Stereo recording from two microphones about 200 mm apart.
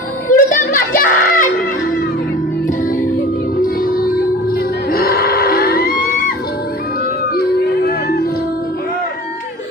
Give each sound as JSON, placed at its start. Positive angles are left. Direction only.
{"t": 0.3, "sound": "a sound", "side_deg": 40}
{"t": 3.6, "sound": "music", "side_deg": 45}
{"t": 7.3, "sound": "music", "side_deg": 50}